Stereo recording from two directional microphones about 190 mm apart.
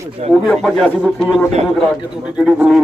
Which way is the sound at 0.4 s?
Centre (ahead or behind).